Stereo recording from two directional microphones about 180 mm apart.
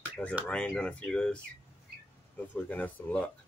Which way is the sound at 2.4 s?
10° left (ahead or behind).